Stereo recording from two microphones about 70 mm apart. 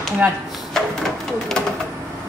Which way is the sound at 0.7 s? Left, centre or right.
Centre.